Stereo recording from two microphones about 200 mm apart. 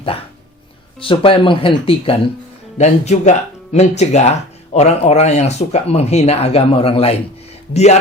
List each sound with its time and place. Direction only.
0.9 s speech: 25° left (ahead or behind)